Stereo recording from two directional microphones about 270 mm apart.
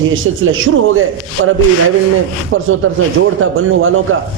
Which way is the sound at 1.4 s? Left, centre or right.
Right.